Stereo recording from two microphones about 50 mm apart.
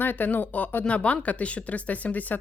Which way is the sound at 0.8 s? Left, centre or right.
Left.